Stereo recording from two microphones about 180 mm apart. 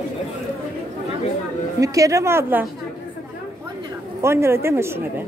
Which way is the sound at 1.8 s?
20° right (ahead or behind).